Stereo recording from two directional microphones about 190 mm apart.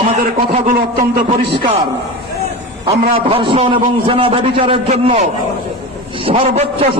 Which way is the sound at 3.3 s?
30° right (ahead or behind).